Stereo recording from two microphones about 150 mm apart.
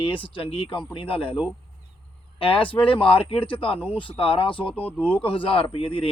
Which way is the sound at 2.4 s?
35° left (ahead or behind).